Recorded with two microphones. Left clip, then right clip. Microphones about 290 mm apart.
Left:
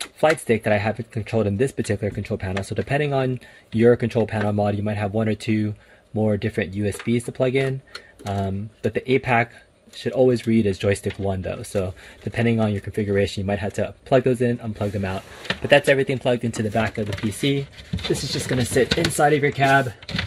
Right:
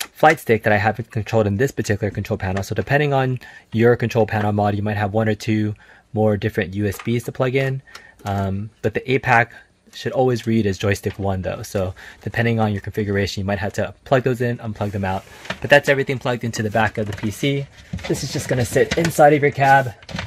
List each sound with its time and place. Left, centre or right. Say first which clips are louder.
0.0 s speech: right 5 dB; right
18.8 s speech: right 4 dB; right